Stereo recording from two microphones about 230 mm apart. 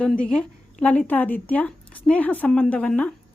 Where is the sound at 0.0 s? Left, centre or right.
Centre.